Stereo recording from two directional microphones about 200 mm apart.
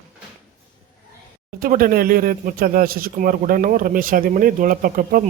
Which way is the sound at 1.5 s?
45° right (ahead or behind).